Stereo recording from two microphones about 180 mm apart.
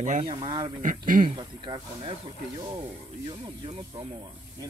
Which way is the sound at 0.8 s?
50° right (ahead or behind).